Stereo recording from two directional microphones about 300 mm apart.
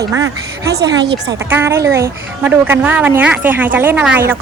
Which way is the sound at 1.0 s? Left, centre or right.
Right.